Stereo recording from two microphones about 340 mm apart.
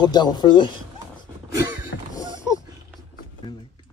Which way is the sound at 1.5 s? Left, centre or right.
Centre.